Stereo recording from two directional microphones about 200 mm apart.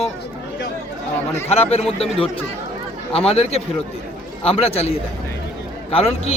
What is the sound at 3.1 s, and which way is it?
A man's voice, 30° left (ahead or behind).